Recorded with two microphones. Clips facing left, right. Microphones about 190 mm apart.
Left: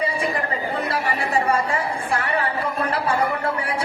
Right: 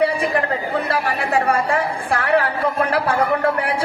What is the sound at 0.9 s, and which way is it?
A woman's voice, 65° right (ahead or behind).